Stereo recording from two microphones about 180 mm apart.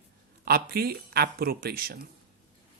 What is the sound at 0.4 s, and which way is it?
Speech, 60° right (ahead or behind).